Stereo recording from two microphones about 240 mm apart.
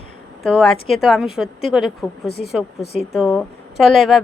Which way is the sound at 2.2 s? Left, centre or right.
Left.